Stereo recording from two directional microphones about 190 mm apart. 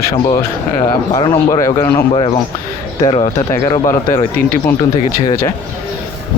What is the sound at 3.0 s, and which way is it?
Speech, 30° left (ahead or behind).